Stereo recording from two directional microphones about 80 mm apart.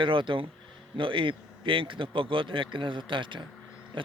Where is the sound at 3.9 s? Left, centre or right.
Right.